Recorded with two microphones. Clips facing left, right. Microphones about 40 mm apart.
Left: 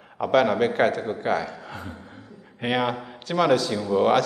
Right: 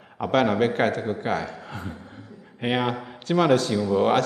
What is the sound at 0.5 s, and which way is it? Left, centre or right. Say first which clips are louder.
Speech: left 1 dB; centre.